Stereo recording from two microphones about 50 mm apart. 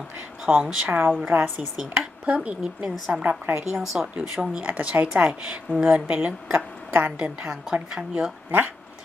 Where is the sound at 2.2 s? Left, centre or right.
Right.